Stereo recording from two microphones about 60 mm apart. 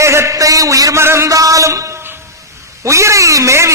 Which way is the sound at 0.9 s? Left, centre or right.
Right.